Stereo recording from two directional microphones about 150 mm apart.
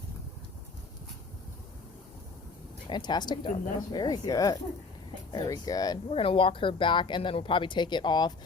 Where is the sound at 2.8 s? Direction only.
30° left (ahead or behind).